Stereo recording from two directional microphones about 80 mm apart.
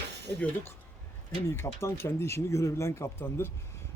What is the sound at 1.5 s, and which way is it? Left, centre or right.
Speech, left.